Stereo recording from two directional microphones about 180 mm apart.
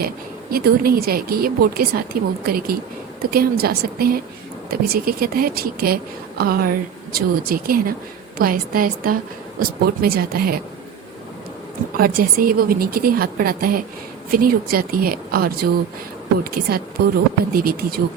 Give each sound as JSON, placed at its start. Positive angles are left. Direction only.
{"t": 0.5, "sound": "a woman's voice", "side_deg": -55}
{"t": 11.9, "sound": "a woman's voice", "side_deg": -55}